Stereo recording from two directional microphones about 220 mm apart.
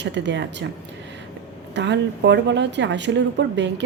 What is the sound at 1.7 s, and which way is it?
Speech, 55° right (ahead or behind).